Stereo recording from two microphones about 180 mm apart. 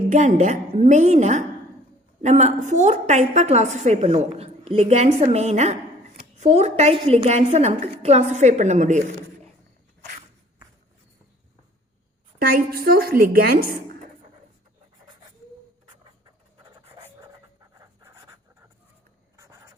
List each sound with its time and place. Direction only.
0.1 s a woman's voice: 45° right (ahead or behind)
12.5 s a woman's voice: 55° right (ahead or behind)
17.6 s writing: 20° right (ahead or behind)